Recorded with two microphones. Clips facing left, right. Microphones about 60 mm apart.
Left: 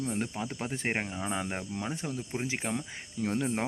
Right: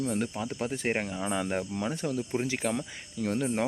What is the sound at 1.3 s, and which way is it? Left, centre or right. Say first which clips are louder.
Speech: right 4 dB; centre.